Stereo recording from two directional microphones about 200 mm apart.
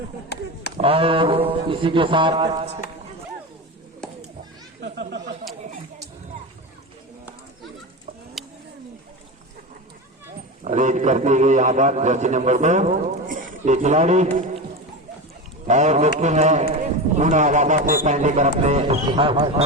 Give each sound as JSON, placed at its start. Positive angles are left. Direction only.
{"t": 0.8, "sound": "a man's voice", "side_deg": -30}
{"t": 4.8, "sound": "chatter", "side_deg": -55}
{"t": 8.4, "sound": "a sound", "side_deg": 0}
{"t": 10.6, "sound": "a man's voice", "side_deg": -35}
{"t": 15.6, "sound": "a man's voice", "side_deg": -35}